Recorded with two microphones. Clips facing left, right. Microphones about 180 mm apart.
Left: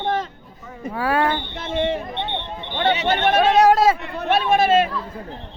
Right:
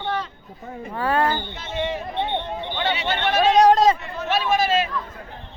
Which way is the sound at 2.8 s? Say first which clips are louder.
Left 6 dB; 50° left (ahead or behind).